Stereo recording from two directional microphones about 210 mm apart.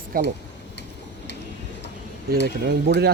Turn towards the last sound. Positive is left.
turn(degrees=-50)  # may be behind; listen again after turning